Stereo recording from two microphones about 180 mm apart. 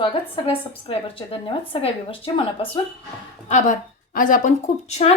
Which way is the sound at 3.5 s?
45° left (ahead or behind).